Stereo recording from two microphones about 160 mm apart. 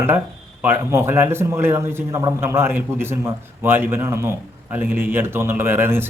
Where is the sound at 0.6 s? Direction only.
15° right (ahead or behind).